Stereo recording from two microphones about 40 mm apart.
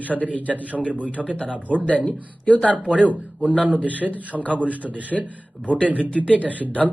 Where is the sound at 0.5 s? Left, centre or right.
Left.